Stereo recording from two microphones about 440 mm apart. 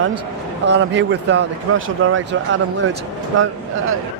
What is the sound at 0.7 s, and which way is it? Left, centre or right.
Speech, right.